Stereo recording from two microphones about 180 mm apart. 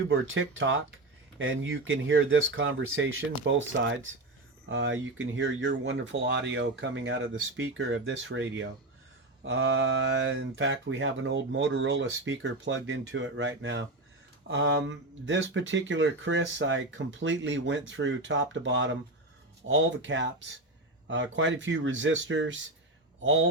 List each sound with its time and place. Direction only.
0.1 s speech: 90° right